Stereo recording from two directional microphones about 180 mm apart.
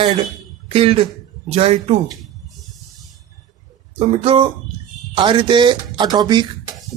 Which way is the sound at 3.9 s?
35° right (ahead or behind).